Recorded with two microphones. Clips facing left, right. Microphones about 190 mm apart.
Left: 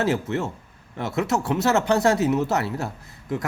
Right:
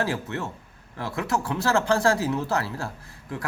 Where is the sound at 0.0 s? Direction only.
25° left (ahead or behind).